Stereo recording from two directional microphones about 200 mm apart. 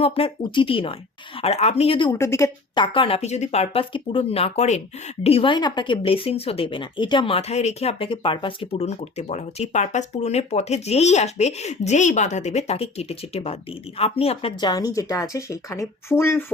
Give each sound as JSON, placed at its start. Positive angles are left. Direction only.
{"t": 0.0, "sound": "speech", "side_deg": 25}
{"t": 2.1, "sound": "a woman's voice", "side_deg": 15}